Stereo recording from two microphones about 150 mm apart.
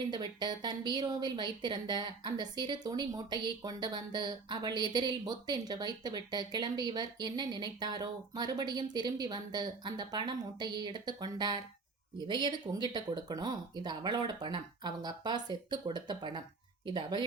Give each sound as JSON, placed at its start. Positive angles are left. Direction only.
{"t": 0.1, "sound": "speech", "side_deg": -30}